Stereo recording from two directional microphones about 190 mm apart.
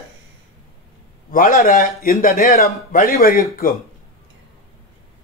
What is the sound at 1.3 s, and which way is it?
Speech, 45° left (ahead or behind).